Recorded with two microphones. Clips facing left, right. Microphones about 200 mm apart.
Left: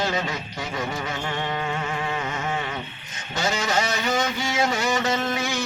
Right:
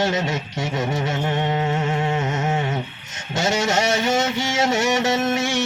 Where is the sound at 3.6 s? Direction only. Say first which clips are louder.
Right 5 dB; 25° right (ahead or behind).